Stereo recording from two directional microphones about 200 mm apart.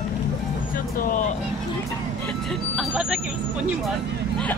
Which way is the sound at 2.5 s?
5° right (ahead or behind).